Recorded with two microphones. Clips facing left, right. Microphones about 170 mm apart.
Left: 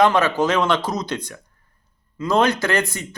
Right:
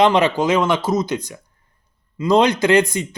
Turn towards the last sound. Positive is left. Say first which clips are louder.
# right 7 dB
turn(degrees=-20)  # may be behind; listen again after turning